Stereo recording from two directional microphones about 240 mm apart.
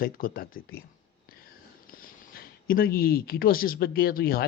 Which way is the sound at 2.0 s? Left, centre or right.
Left.